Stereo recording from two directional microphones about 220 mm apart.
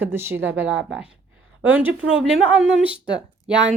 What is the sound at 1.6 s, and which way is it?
A woman's voice, 5° right (ahead or behind).